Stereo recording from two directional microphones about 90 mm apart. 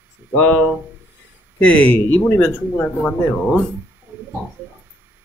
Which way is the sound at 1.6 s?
15° left (ahead or behind).